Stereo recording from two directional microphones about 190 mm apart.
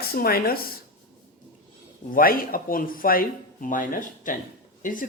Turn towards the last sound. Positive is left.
turn(degrees=45)  # may be behind; listen again after turning